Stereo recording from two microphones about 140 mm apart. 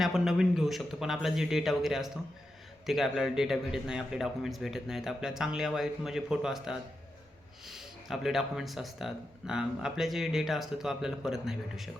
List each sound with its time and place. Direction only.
0.0 s speech: 5° right (ahead or behind)